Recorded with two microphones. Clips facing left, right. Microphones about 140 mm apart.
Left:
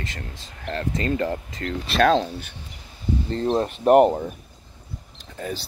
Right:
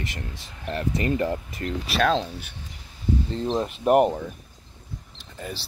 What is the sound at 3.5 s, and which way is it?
Speech, 45° left (ahead or behind).